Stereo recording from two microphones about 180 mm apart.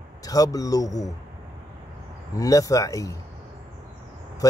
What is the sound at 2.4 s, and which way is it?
Speech, 20° left (ahead or behind).